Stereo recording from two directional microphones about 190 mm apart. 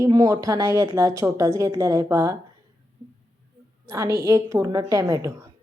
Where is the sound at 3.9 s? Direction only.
15° right (ahead or behind).